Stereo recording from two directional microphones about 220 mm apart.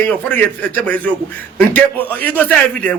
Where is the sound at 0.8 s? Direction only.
5° left (ahead or behind).